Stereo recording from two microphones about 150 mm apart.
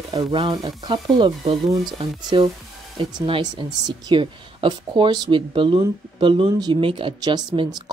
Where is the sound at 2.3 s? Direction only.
35° right (ahead or behind).